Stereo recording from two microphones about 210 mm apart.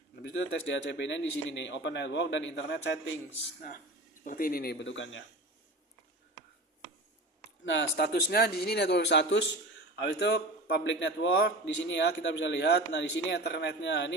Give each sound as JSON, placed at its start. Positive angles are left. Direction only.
{"t": 0.2, "sound": "a man's voice", "side_deg": 60}
{"t": 3.6, "sound": "speech", "side_deg": 40}
{"t": 7.6, "sound": "a man's voice", "side_deg": 60}